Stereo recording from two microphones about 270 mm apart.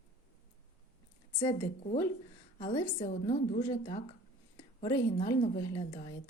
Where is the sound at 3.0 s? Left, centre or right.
Left.